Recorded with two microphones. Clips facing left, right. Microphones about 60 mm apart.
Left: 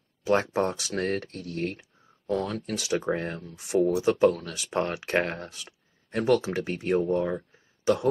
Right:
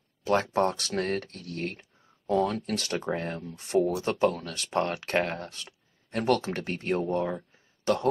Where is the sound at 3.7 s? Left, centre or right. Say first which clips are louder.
Left 1 dB; right.